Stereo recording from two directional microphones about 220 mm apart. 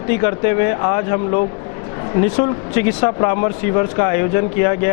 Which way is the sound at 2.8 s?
25° left (ahead or behind).